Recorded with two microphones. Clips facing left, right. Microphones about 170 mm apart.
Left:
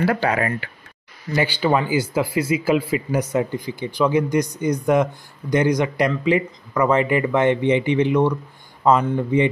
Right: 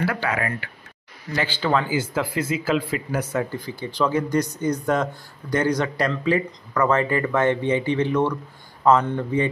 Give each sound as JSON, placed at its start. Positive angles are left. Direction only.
{"t": 0.1, "sound": "speech", "side_deg": 35}
{"t": 1.3, "sound": "speech", "side_deg": 15}